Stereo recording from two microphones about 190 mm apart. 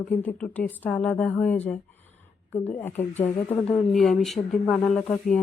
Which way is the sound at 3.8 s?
Centre (ahead or behind).